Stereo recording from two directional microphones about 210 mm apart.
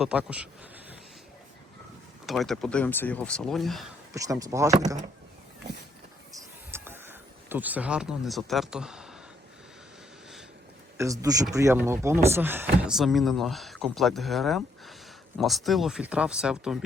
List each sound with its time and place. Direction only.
0.0 s speech: 5° right (ahead or behind)
2.2 s speech: centre (ahead or behind)
4.1 s speech: 15° right (ahead or behind)
6.3 s a sound: 10° right (ahead or behind)
10.9 s speech: 15° right (ahead or behind)